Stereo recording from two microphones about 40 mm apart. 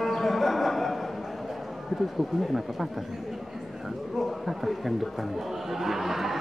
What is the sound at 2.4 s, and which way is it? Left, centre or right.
Speech, centre.